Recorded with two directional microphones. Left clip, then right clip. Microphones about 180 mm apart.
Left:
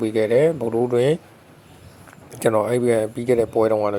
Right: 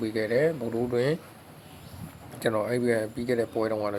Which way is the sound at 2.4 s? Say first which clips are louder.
Left 8 dB; 40° left (ahead or behind).